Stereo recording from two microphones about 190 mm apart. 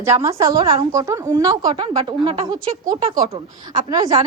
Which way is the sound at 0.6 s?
30° right (ahead or behind).